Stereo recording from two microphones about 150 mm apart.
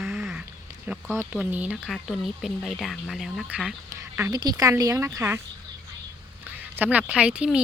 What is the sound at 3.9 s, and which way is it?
Speech, 15° right (ahead or behind).